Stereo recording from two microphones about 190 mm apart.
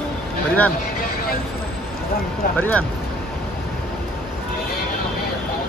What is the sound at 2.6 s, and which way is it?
Speech, 10° left (ahead or behind).